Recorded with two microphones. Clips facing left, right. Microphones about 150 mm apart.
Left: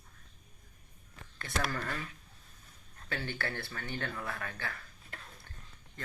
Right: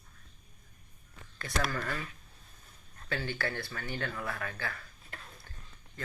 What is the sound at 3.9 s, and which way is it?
Speech, 25° left (ahead or behind).